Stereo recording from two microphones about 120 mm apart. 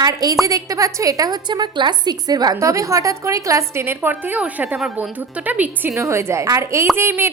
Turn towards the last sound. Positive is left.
turn(degrees=-20)  # may be behind; listen again after turning